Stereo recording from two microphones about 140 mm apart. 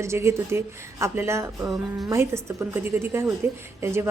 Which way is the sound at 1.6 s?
Centre (ahead or behind).